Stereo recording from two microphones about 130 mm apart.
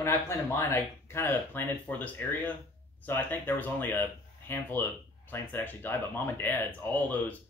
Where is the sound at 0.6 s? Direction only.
20° left (ahead or behind).